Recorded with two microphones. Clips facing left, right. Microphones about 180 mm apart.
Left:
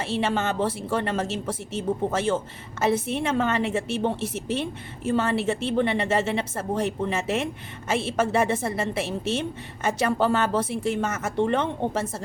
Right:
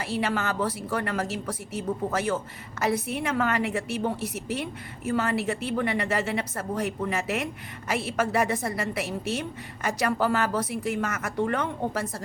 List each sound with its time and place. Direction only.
0.0 s a woman's voice: 25° left (ahead or behind)